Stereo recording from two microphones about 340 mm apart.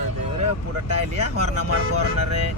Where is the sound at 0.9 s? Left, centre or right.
Right.